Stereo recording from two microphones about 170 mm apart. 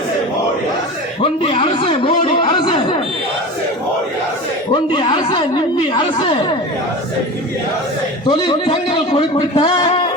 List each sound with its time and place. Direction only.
1.2 s a sound: 35° left (ahead or behind)
4.7 s a woman's voice: 30° left (ahead or behind)
8.3 s a woman's voice: 25° left (ahead or behind)